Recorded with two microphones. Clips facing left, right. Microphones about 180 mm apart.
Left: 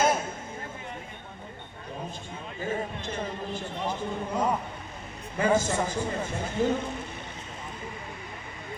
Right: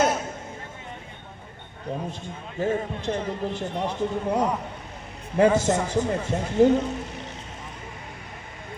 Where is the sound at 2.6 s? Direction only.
75° right (ahead or behind).